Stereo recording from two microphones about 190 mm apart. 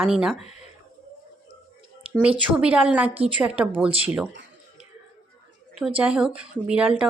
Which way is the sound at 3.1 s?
30° right (ahead or behind).